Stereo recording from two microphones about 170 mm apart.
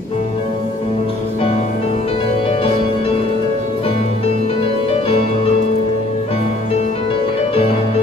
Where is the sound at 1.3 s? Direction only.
40° left (ahead or behind).